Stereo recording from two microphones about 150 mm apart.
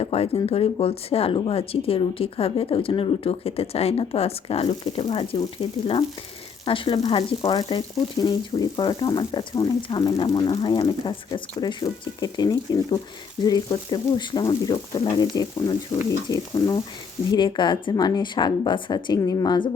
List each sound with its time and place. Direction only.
0.0 s a sound: 40° left (ahead or behind)
0.3 s speech: 40° left (ahead or behind)
6.7 s speech: 35° left (ahead or behind)